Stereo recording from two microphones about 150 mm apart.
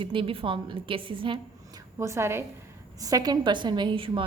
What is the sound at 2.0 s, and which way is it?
A woman's voice, 20° right (ahead or behind).